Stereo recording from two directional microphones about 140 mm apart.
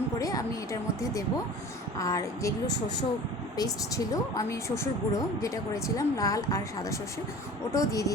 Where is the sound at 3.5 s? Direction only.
25° left (ahead or behind).